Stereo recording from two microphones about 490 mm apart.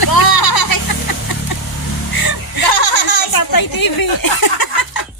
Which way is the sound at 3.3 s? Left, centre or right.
Left.